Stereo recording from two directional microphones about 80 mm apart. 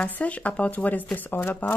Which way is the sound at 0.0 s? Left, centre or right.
Centre.